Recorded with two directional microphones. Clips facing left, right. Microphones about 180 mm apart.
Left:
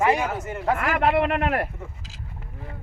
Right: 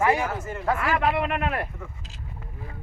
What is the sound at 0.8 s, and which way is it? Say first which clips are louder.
Speech: left 3 dB; 35° left (ahead or behind).